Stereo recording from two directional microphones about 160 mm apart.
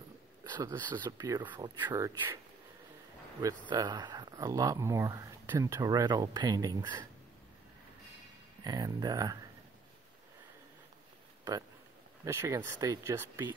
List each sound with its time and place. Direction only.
0.4 s speech: 25° right (ahead or behind)
3.3 s speech: 25° right (ahead or behind)
8.6 s speech: 25° right (ahead or behind)
12.3 s speech: 20° right (ahead or behind)